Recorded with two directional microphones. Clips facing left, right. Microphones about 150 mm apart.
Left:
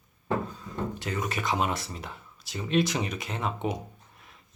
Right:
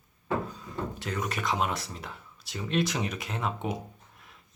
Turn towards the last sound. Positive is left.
turn(degrees=0)  # may be behind; listen again after turning